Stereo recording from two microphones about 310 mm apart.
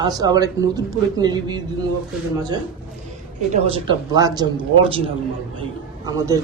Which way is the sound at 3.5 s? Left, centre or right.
Centre.